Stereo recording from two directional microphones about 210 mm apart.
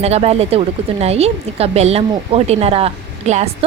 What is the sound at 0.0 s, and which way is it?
Speech, 30° right (ahead or behind).